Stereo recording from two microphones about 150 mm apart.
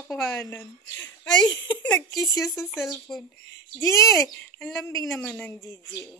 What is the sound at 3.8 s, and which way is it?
Speech, 20° left (ahead or behind).